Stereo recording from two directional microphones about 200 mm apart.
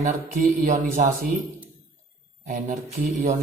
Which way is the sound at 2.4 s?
40° right (ahead or behind).